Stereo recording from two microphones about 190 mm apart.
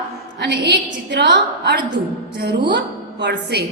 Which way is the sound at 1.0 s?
65° right (ahead or behind).